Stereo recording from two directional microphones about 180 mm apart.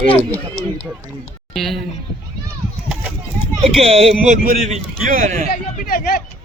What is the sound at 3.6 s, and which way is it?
A man's voice, 35° right (ahead or behind).